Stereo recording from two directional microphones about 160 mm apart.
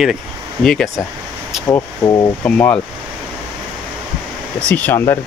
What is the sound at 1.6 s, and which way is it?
Speech, 15° left (ahead or behind).